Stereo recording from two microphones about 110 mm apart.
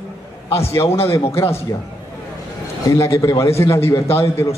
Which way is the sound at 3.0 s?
25° left (ahead or behind).